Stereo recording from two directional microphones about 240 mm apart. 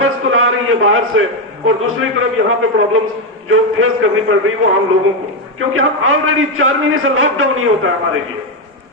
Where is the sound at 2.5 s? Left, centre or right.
Right.